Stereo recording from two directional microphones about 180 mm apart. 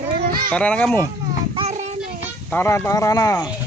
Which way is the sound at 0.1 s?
55° right (ahead or behind).